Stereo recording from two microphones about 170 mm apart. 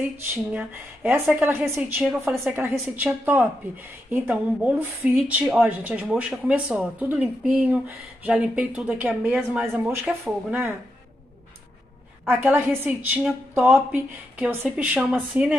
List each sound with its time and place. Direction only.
0.2 s speech: 10° right (ahead or behind)
12.3 s speech: 15° right (ahead or behind)